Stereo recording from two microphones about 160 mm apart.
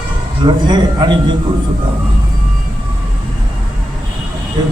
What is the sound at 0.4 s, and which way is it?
Speech, 25° right (ahead or behind).